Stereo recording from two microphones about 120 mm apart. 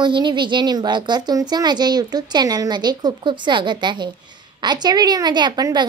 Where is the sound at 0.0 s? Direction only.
40° right (ahead or behind).